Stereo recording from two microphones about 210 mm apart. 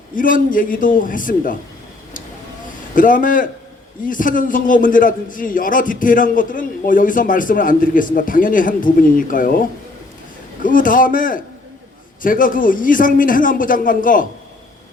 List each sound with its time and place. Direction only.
0.2 s a man's voice: 40° left (ahead or behind)
2.9 s a man's voice: 40° left (ahead or behind)
10.6 s a man's voice: 40° left (ahead or behind)